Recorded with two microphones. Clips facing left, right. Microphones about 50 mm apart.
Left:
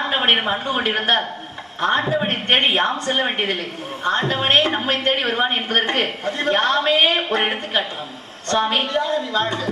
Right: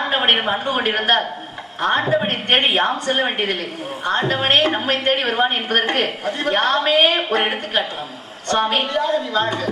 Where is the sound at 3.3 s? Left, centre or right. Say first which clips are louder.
Right 1 dB; centre.